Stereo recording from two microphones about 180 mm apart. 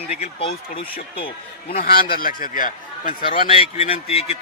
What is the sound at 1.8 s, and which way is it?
Speech, 55° left (ahead or behind).